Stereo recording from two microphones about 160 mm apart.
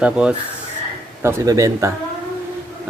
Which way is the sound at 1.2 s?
20° right (ahead or behind).